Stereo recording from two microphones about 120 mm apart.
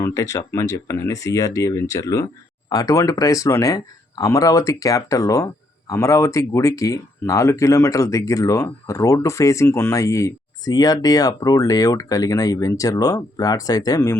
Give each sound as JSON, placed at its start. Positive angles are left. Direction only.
{"t": 0.0, "sound": "speech", "side_deg": 25}